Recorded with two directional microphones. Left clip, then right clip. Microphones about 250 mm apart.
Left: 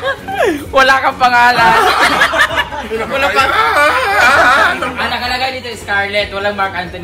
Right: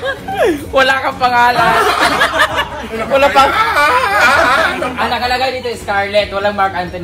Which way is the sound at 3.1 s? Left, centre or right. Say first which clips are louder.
Right 4 dB; centre.